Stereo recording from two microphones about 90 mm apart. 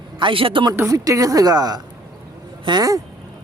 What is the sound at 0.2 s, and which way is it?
Speech, 75° right (ahead or behind).